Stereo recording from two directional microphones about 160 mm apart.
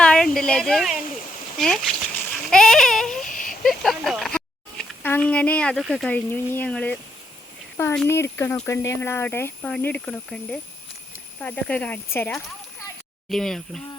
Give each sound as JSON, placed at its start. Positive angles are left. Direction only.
{"t": 0.0, "sound": "a sound", "side_deg": 5}
{"t": 1.5, "sound": "speech", "side_deg": 0}
{"t": 2.5, "sound": "baby cry", "side_deg": 5}
{"t": 3.2, "sound": "a sound", "side_deg": 55}
{"t": 3.6, "sound": "speech", "side_deg": 0}
{"t": 8.0, "sound": "speech", "side_deg": 15}
{"t": 13.3, "sound": "baby cry", "side_deg": 5}